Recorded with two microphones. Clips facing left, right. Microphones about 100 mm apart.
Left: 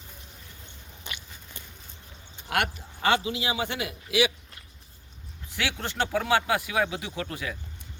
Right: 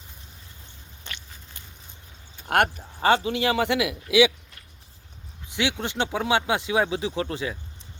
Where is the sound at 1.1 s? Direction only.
10° left (ahead or behind).